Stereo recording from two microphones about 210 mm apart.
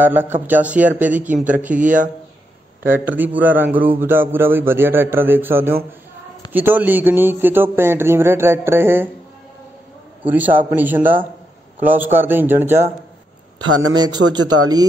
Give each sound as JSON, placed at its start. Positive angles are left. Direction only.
{"t": 0.0, "sound": "a man's voice", "side_deg": -10}
{"t": 10.3, "sound": "a man's voice", "side_deg": -10}
{"t": 14.4, "sound": "speech", "side_deg": -90}